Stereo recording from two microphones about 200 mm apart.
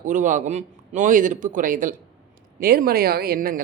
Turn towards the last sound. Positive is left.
turn(degrees=-45)  # may be behind; listen again after turning